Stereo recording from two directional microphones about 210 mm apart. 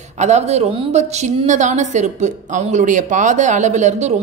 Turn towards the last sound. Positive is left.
turn(degrees=-35)  # may be behind; listen again after turning